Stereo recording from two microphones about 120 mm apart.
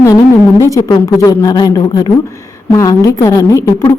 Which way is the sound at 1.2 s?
30° left (ahead or behind).